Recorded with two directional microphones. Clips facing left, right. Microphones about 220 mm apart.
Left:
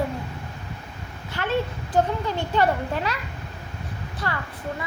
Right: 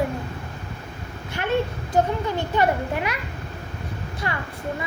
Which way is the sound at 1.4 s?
15° right (ahead or behind).